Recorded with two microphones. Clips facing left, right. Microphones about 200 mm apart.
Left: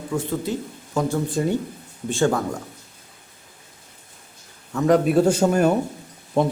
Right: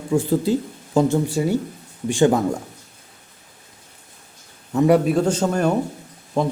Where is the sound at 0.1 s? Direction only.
30° right (ahead or behind).